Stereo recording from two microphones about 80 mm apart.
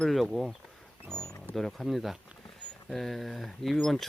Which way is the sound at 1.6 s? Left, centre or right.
Centre.